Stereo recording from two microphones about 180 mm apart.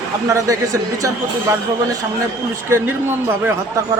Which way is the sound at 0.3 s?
20° right (ahead or behind).